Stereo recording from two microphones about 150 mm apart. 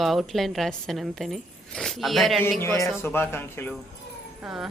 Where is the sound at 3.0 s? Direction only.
15° left (ahead or behind).